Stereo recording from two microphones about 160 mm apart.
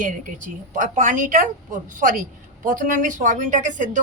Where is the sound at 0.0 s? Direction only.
55° right (ahead or behind).